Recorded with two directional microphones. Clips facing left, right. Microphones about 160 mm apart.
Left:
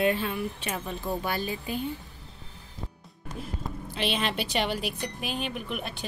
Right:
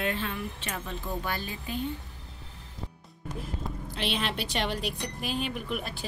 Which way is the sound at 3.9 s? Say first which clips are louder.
Left 3 dB; centre (ahead or behind).